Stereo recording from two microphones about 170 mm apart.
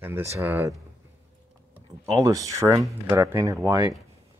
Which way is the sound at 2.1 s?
20° right (ahead or behind).